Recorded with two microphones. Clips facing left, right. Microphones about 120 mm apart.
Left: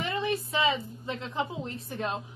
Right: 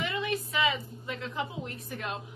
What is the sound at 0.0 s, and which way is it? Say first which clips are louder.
A woman's voice: left 2 dB; 30° left (ahead or behind).